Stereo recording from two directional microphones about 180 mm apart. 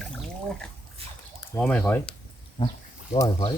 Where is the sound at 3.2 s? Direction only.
20° left (ahead or behind).